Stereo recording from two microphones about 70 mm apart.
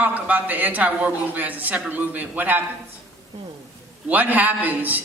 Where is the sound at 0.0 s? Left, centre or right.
Right.